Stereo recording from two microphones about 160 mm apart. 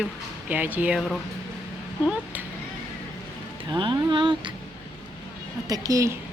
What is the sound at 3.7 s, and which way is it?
Speech, 30° right (ahead or behind).